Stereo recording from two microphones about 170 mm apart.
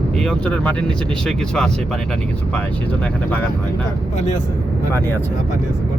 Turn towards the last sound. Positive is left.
turn(degrees=15)  # may be behind; listen again after turning